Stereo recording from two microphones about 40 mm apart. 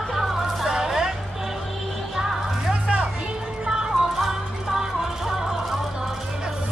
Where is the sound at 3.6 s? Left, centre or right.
Centre.